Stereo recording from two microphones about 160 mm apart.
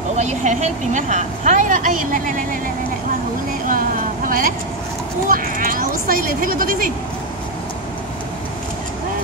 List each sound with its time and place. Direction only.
0.2 s speech: 45° right (ahead or behind)
3.6 s vehicle: 60° right (ahead or behind)
5.3 s speech: 60° right (ahead or behind)